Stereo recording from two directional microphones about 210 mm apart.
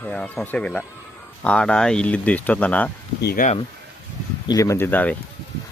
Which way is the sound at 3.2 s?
50° left (ahead or behind).